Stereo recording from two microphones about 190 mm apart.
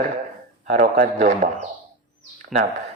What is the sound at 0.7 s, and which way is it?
Speech, 40° right (ahead or behind).